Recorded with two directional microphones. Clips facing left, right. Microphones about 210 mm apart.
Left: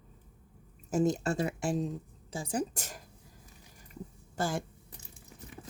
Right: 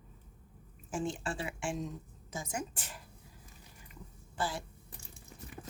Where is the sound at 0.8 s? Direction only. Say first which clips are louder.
Left 8 dB; 40° left (ahead or behind).